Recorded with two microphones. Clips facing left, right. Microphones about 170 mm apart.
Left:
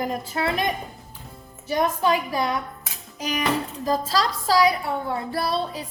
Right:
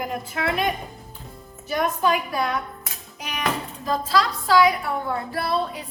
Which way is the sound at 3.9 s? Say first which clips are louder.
Right 1 dB; 40° left (ahead or behind).